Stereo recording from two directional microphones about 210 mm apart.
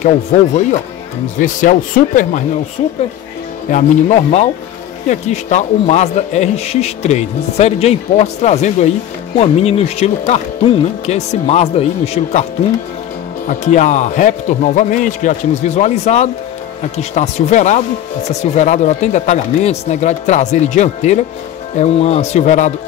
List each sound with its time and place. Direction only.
0.0 s a man's voice: 35° left (ahead or behind)
3.7 s a man's voice: 35° left (ahead or behind)
13.5 s a man's voice: 35° left (ahead or behind)